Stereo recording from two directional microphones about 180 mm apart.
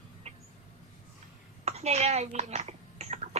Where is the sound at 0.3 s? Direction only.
35° right (ahead or behind).